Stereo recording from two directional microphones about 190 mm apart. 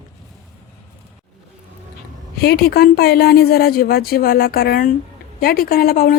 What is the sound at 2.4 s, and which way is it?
A woman's voice, 55° left (ahead or behind).